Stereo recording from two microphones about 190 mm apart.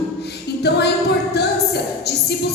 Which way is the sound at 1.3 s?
60° left (ahead or behind).